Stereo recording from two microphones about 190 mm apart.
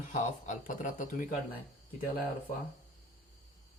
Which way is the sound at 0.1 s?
45° left (ahead or behind).